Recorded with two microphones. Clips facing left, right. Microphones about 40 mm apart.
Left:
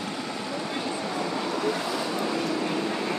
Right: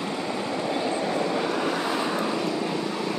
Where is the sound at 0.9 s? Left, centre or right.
Centre.